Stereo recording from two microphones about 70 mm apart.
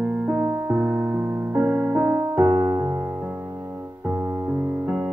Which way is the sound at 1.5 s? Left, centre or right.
Right.